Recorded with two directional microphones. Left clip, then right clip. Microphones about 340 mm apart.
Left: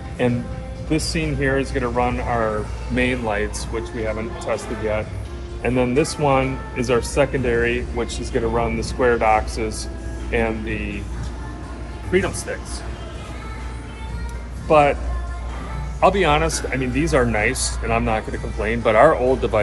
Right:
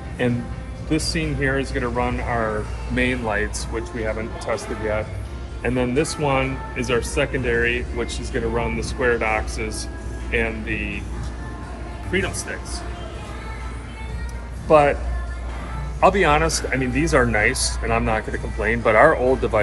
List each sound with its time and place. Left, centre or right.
0.8 s speech: centre
12.1 s speech: left
14.7 s speech: centre
16.0 s speech: centre